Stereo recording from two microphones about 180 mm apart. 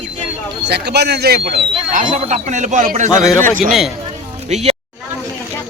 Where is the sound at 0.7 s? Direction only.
65° right (ahead or behind).